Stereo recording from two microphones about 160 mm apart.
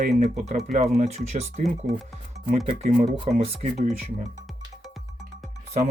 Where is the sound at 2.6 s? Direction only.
55° right (ahead or behind).